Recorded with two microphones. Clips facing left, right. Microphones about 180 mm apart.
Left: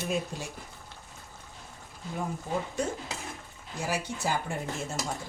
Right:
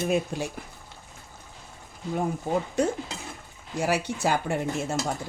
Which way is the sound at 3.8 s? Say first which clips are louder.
Right 6 dB; 70° right (ahead or behind).